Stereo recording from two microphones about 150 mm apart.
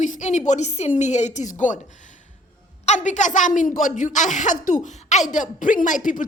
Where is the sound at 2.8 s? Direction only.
55° left (ahead or behind).